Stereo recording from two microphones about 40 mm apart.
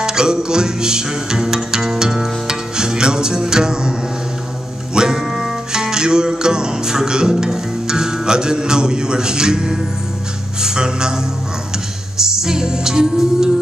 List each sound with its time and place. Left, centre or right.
0.0 s music: centre
4.9 s music: centre
5.2 s music: centre
5.7 s music: centre
12.2 s music: centre